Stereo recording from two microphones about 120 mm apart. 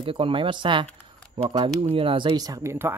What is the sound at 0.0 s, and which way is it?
Speech, 50° right (ahead or behind).